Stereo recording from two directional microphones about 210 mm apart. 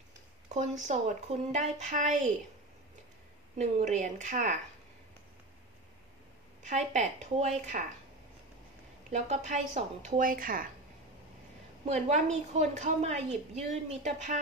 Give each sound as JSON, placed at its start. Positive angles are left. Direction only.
{"t": 0.5, "sound": "a woman's voice", "side_deg": -35}
{"t": 3.5, "sound": "a woman's voice", "side_deg": -35}
{"t": 6.9, "sound": "a woman's voice", "side_deg": -35}
{"t": 9.1, "sound": "a woman's voice", "side_deg": -35}
{"t": 11.8, "sound": "a woman's voice", "side_deg": -30}